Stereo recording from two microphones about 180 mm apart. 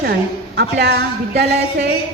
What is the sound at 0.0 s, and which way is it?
A woman's voice, 65° right (ahead or behind).